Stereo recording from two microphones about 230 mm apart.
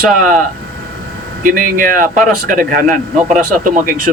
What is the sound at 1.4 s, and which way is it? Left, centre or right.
Speech, right.